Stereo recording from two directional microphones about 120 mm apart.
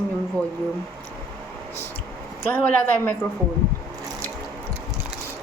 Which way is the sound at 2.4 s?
15° left (ahead or behind).